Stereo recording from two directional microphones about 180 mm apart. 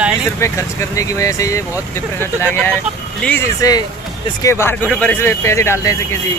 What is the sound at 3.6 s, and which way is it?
Speech, 20° left (ahead or behind).